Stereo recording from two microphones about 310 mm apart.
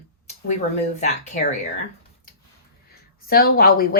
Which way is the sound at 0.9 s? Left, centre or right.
Left.